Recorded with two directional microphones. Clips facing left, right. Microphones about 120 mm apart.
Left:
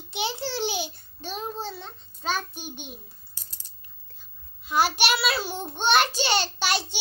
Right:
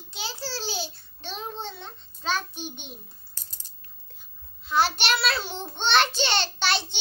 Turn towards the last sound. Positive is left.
turn(degrees=10)  # may be behind; listen again after turning